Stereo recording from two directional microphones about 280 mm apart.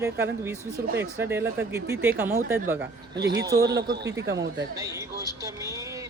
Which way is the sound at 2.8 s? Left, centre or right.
Right.